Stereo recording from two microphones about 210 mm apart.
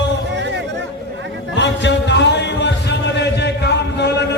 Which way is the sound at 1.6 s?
55° left (ahead or behind).